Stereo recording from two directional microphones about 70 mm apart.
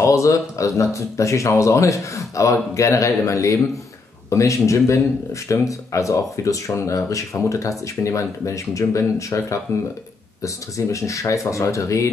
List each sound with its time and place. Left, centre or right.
0.0 s speech: left